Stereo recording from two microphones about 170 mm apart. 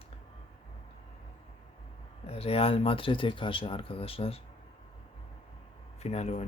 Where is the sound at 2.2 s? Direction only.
35° left (ahead or behind).